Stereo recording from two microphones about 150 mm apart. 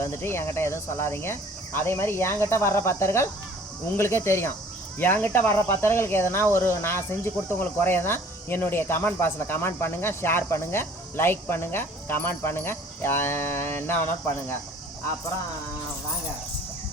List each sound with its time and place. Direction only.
0.0 s speech: 15° left (ahead or behind)